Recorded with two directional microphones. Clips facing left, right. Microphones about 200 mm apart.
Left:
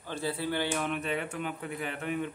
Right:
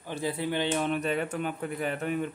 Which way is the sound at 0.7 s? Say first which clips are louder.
Right 4 dB; 35° right (ahead or behind).